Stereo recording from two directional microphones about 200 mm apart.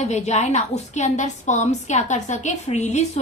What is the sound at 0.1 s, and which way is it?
A woman's voice, 35° left (ahead or behind).